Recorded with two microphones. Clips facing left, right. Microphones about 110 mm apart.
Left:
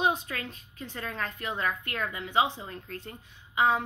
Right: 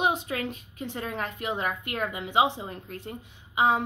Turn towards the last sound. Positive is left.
turn(degrees=-20)  # may be behind; listen again after turning